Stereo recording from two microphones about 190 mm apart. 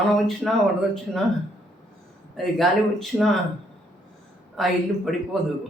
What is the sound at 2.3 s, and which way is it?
Speech, centre (ahead or behind).